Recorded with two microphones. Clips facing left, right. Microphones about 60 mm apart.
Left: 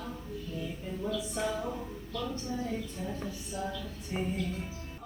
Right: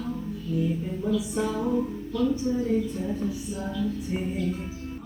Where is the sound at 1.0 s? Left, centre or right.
Centre.